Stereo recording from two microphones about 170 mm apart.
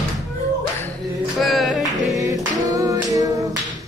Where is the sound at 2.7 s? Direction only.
20° right (ahead or behind).